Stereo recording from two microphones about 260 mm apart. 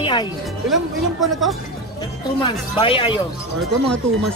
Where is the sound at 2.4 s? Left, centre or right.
Centre.